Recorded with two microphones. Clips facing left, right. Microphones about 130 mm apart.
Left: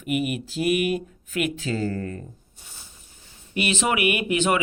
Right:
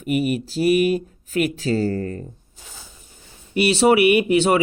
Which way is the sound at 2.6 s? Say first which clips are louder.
Right 5 dB; 90° right.